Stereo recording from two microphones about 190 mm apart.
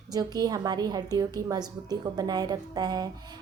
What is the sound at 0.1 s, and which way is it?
A woman's voice, 20° right (ahead or behind).